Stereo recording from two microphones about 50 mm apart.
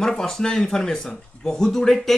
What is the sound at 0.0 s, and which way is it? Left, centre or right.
Speech, centre.